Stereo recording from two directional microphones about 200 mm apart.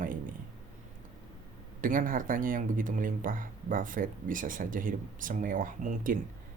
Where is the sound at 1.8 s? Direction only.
40° right (ahead or behind).